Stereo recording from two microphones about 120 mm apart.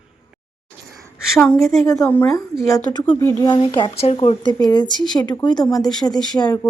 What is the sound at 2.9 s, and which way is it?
Speech, 40° left (ahead or behind).